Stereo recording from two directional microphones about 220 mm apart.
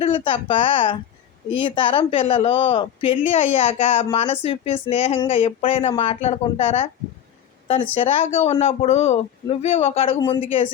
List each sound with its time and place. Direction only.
0.0 s speech: 25° left (ahead or behind)